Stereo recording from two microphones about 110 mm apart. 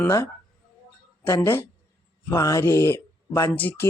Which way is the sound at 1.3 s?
20° left (ahead or behind).